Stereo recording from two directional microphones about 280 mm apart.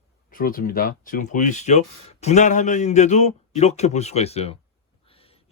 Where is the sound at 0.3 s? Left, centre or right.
Left.